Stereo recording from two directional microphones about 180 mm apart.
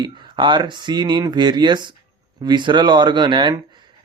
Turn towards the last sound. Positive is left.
turn(degrees=-25)  # may be behind; listen again after turning